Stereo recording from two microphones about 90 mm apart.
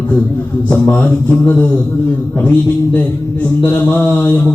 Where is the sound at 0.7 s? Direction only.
20° left (ahead or behind).